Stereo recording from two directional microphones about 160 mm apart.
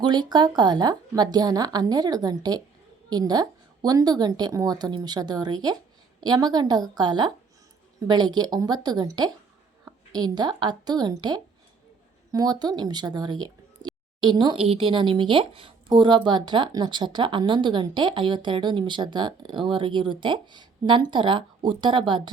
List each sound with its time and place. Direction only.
0.0 s a woman's voice: 25° right (ahead or behind)